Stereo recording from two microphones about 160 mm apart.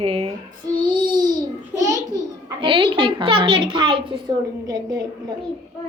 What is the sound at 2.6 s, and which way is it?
A woman's voice, 30° right (ahead or behind).